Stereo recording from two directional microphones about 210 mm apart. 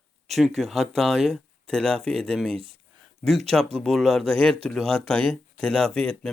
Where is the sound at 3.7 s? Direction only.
Centre (ahead or behind).